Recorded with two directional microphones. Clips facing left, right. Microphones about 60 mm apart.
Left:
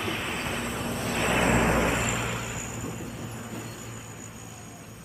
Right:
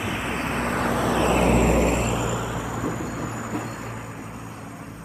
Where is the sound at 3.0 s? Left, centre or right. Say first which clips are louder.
Right 8 dB; right.